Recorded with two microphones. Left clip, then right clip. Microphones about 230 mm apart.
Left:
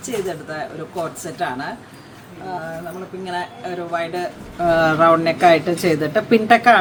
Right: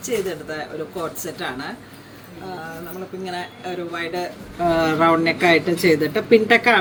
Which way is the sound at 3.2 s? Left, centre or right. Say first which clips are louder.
Left 4 dB; centre.